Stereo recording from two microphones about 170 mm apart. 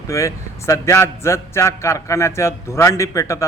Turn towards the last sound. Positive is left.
turn(degrees=20)  # may be behind; listen again after turning